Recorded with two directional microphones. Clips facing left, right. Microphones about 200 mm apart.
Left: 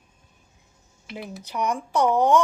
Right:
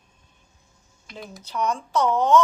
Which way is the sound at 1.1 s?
5° left (ahead or behind).